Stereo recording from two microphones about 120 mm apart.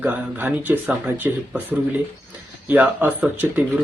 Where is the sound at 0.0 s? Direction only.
15° right (ahead or behind).